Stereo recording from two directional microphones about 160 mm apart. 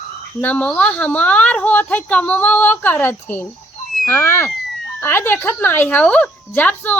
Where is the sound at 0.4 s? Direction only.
10° left (ahead or behind).